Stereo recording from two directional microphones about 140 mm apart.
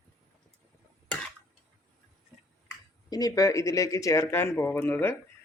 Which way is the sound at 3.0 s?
25° left (ahead or behind).